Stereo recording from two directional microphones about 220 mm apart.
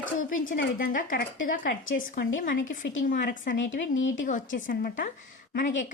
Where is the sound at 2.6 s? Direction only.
60° left (ahead or behind).